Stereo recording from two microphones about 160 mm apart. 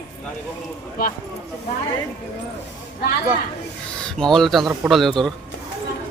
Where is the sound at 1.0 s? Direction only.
65° left (ahead or behind).